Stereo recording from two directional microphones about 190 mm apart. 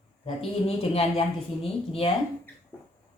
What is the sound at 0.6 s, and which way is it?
A woman's voice, 30° left (ahead or behind).